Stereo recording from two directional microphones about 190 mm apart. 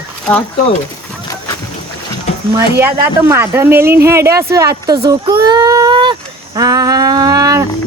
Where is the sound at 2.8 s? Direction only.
10° right (ahead or behind).